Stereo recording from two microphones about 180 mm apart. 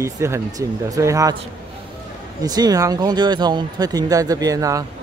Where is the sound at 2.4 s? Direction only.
20° right (ahead or behind).